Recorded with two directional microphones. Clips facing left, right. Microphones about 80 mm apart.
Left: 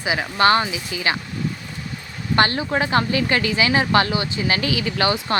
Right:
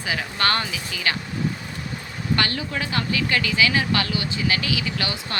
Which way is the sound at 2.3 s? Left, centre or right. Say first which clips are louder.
Left 7 dB; left.